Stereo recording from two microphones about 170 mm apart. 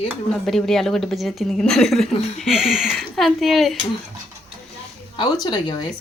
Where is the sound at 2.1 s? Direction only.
40° left (ahead or behind).